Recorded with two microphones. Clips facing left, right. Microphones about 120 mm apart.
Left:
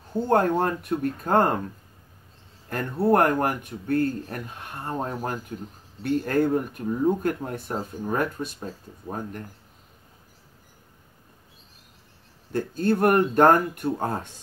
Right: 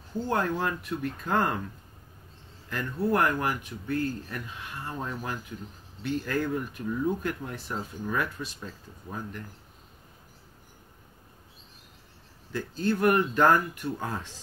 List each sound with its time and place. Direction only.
0.3 s speech: 55° left (ahead or behind)
2.7 s speech: 55° left (ahead or behind)
12.5 s speech: 55° left (ahead or behind)